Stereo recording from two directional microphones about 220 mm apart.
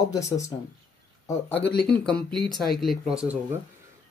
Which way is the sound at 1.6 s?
45° left (ahead or behind).